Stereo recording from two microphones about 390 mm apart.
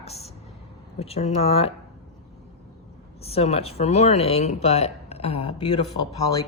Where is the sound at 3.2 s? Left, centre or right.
Centre.